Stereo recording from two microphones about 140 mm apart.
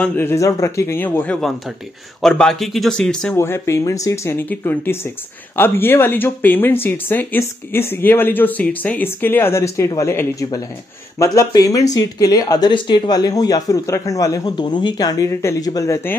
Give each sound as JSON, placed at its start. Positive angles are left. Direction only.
{"t": 0.0, "sound": "speech", "side_deg": 15}
{"t": 3.3, "sound": "speech", "side_deg": 20}